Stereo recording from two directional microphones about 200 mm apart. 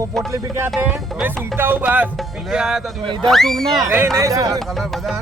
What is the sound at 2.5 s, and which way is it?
Speech, 5° right (ahead or behind).